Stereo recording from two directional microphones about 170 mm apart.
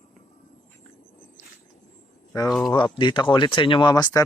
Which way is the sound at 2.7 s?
25° left (ahead or behind).